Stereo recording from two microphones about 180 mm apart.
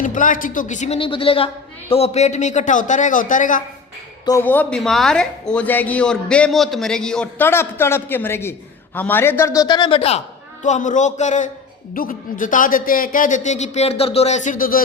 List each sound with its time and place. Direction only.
0.0 s a man's voice: 45° left (ahead or behind)
0.9 s a man's voice: 30° left (ahead or behind); by 3.6 s 45° left (ahead or behind)
4.3 s a man's voice: 10° left (ahead or behind); by 10.2 s 30° left (ahead or behind)
10.6 s a man's voice: 45° left (ahead or behind)